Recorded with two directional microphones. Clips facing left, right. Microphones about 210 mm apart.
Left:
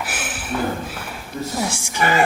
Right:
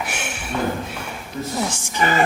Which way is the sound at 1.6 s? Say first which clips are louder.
Even; 10° left (ahead or behind).